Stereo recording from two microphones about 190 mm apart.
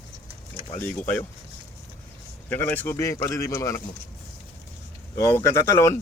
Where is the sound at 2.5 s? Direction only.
10° left (ahead or behind).